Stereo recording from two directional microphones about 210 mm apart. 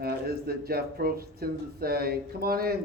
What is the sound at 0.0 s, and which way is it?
Speech, 45° right (ahead or behind).